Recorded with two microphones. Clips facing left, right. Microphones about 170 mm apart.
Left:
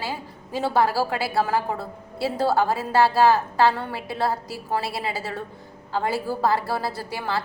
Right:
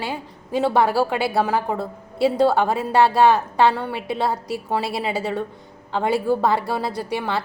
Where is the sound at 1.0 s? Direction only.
20° right (ahead or behind).